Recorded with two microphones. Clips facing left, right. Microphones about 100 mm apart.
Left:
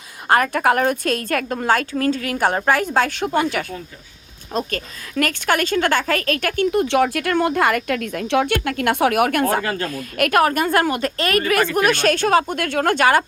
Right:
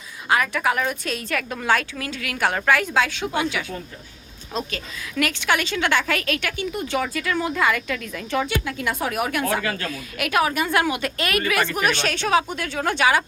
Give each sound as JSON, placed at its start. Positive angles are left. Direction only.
{"t": 0.3, "sound": "a woman's voice", "side_deg": 45}
{"t": 6.6, "sound": "speech", "side_deg": 80}
{"t": 9.6, "sound": "speech", "side_deg": 40}